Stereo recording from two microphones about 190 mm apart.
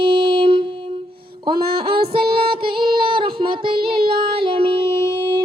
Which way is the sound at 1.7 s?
25° right (ahead or behind).